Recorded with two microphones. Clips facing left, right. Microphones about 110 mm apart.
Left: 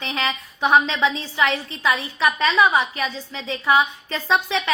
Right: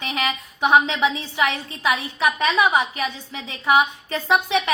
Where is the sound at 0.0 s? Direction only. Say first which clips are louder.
Even; 20° right (ahead or behind).